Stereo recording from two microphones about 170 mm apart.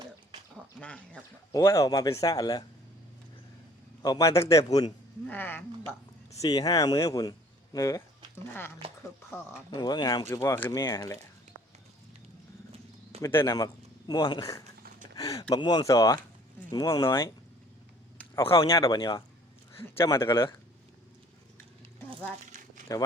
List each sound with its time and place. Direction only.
0.5 s speech: 5° left (ahead or behind)
1.5 s speech: 15° left (ahead or behind)
4.0 s speech: 20° left (ahead or behind)
6.4 s speech: 20° left (ahead or behind)
9.7 s speech: 25° left (ahead or behind)
13.2 s speech: 20° left (ahead or behind)
18.2 s a sound: 15° left (ahead or behind)
18.5 s speech: 20° left (ahead or behind)
22.9 s speech: 20° left (ahead or behind)